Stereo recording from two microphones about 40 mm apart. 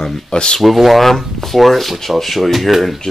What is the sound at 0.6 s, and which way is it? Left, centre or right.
Speech, centre.